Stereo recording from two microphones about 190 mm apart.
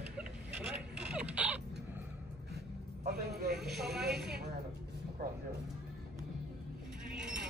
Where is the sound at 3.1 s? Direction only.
60° right (ahead or behind).